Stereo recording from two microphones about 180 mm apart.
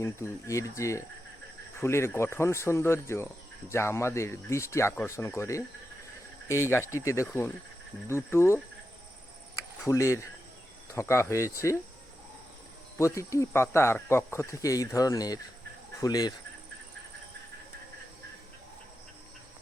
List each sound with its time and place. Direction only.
0.0 s speech: 15° left (ahead or behind)
9.8 s speech: 15° left (ahead or behind)
13.0 s speech: 15° left (ahead or behind)